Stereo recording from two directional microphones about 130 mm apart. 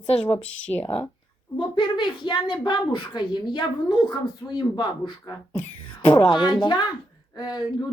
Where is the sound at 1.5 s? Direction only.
40° left (ahead or behind).